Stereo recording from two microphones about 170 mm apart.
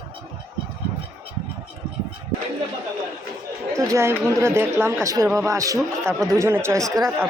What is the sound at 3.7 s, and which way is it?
Speech, 15° right (ahead or behind).